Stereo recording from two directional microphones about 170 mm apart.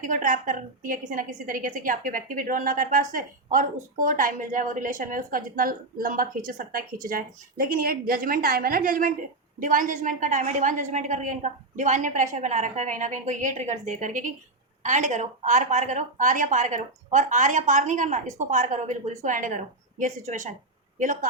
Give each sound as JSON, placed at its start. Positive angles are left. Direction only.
{"t": 0.0, "sound": "a woman's voice", "side_deg": -50}